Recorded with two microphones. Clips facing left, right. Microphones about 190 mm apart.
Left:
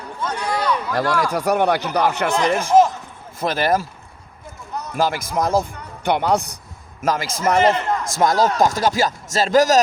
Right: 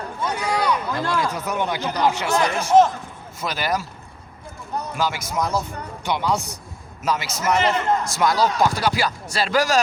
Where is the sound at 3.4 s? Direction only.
50° left (ahead or behind).